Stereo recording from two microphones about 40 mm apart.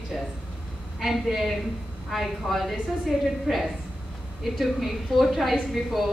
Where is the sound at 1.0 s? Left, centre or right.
Centre.